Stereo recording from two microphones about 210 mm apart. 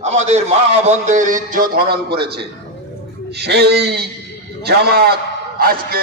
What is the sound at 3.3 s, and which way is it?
A man's voice, 50° right (ahead or behind).